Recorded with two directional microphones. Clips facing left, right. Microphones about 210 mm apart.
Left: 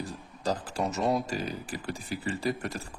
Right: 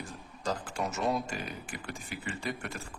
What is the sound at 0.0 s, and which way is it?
Speech, 35° left (ahead or behind).